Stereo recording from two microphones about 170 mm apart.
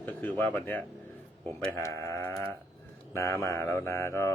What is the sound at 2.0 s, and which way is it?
Sheep, 15° left (ahead or behind).